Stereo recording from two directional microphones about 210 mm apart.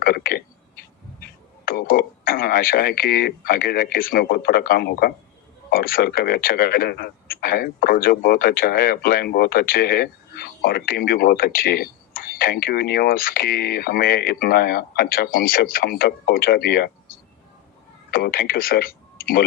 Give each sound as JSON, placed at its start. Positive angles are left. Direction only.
{"t": 0.0, "sound": "a sound", "side_deg": 45}
{"t": 1.6, "sound": "speech", "side_deg": 45}
{"t": 18.1, "sound": "speech", "side_deg": 45}